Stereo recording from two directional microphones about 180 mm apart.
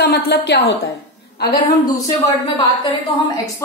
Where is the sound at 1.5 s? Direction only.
20° left (ahead or behind).